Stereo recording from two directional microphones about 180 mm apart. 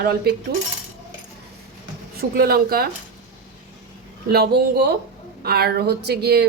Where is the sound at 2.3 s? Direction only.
55° right (ahead or behind).